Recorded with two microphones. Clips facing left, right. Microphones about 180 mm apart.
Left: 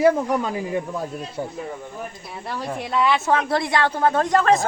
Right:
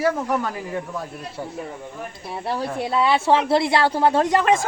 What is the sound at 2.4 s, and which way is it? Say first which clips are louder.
Speech: right 3 dB; 30° right (ahead or behind).